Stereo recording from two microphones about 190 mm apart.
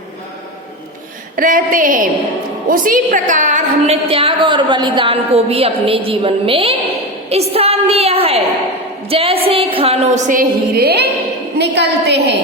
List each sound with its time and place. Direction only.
1.4 s a woman's voice: 45° right (ahead or behind); by 12.4 s 65° right (ahead or behind)